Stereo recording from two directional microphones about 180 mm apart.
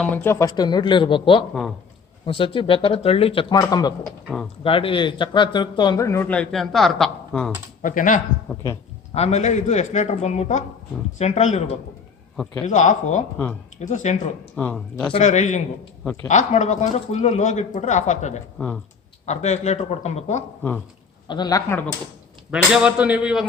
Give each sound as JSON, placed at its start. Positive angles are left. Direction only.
{"t": 0.0, "sound": "speech", "side_deg": 10}
{"t": 7.8, "sound": "speech", "side_deg": 45}
{"t": 9.1, "sound": "speech", "side_deg": 35}
{"t": 14.5, "sound": "speech", "side_deg": 10}
{"t": 15.1, "sound": "speech", "side_deg": 40}
{"t": 21.2, "sound": "speech", "side_deg": 25}
{"t": 22.5, "sound": "speech", "side_deg": -5}